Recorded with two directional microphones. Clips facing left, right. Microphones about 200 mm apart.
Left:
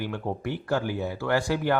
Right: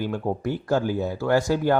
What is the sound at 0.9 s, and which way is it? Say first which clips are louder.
Speech: right 4 dB; 45° right (ahead or behind).